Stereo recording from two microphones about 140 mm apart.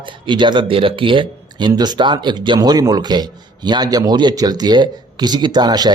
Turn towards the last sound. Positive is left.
turn(degrees=-30)  # may be behind; listen again after turning